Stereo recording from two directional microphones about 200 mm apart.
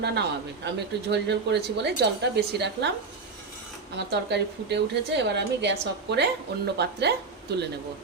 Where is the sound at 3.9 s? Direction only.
55° right (ahead or behind).